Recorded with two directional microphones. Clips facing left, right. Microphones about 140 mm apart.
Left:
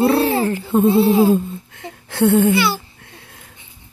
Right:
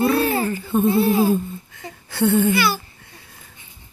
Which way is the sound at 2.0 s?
70° left (ahead or behind).